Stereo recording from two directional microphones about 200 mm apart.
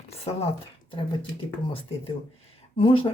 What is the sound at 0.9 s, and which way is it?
Speech, 25° left (ahead or behind).